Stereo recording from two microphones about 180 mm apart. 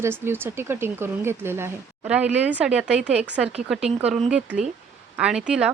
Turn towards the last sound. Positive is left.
turn(degrees=-5)  # may be behind; listen again after turning